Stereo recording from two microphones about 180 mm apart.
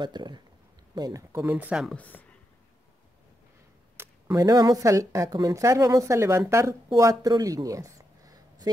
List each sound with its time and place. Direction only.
0.0 s speech: 25° right (ahead or behind); by 2.0 s 5° right (ahead or behind)
2.0 s speech: 10° left (ahead or behind)
3.9 s speech: 15° right (ahead or behind)